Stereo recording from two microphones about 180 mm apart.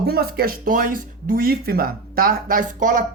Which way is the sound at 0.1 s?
60° right (ahead or behind).